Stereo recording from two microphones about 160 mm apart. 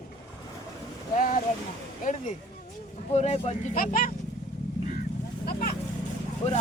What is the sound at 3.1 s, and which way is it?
Speech, 45° left (ahead or behind).